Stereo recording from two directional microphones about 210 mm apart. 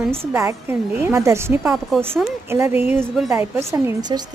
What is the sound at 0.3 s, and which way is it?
A woman's voice, 10° right (ahead or behind).